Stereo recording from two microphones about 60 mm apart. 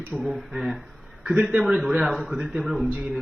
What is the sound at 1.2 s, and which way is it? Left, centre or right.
Speech, centre.